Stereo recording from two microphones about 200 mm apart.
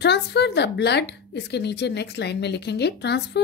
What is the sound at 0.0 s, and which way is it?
A woman's voice, 55° left (ahead or behind).